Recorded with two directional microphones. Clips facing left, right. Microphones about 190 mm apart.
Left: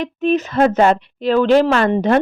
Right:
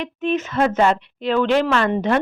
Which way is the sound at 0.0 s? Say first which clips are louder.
Left 5 dB; 40° left (ahead or behind).